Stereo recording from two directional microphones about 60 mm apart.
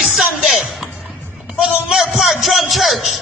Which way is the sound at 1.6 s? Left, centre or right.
Centre.